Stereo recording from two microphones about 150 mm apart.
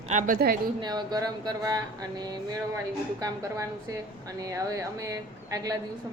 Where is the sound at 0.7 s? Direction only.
30° right (ahead or behind).